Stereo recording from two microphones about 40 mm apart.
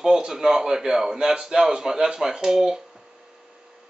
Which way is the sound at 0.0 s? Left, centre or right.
Centre.